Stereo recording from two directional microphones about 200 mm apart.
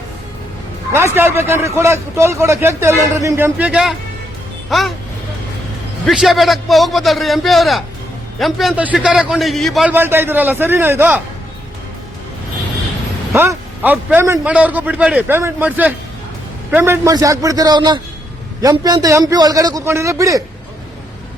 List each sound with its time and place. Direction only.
0.9 s a man's voice: 10° right (ahead or behind)
6.1 s a man's voice: centre (ahead or behind)
13.3 s speech: 10° right (ahead or behind)